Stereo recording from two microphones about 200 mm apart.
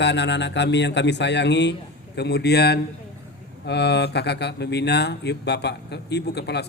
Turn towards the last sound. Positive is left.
turn(degrees=55)  # may be behind; listen again after turning